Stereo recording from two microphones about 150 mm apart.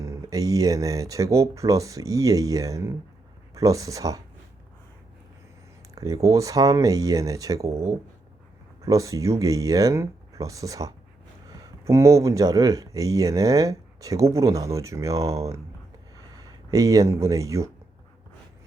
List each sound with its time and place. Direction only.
0.0 s speech: 20° right (ahead or behind)
5.9 s speech: 20° right (ahead or behind)
8.8 s speech: 20° right (ahead or behind)